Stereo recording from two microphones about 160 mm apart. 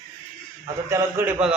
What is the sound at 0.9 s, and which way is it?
Speech, 15° right (ahead or behind).